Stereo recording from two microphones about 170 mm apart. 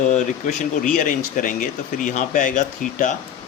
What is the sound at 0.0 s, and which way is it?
Speech, 45° left (ahead or behind).